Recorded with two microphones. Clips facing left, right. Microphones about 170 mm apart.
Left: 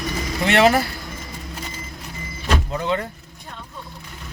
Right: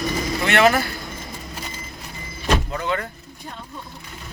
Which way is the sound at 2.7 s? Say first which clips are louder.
Left 2 dB; 20° left (ahead or behind).